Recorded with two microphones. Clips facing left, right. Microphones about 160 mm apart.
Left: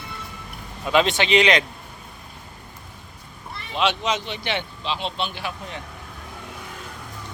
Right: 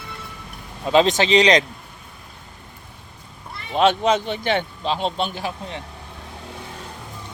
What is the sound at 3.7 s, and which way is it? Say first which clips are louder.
A man's voice: right 6 dB; 50° right (ahead or behind).